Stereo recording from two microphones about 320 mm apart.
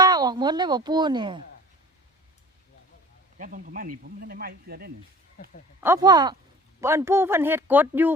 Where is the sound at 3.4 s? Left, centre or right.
Right.